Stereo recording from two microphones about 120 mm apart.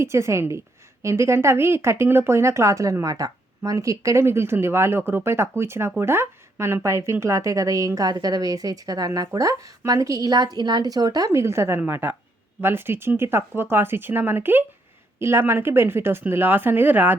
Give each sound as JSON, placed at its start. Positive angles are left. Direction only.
{"t": 0.0, "sound": "speech", "side_deg": -25}